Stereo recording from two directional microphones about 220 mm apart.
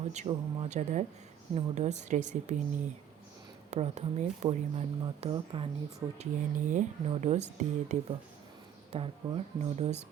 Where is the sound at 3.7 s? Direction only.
30° right (ahead or behind).